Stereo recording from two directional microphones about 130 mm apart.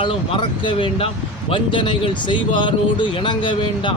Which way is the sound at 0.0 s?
40° left (ahead or behind).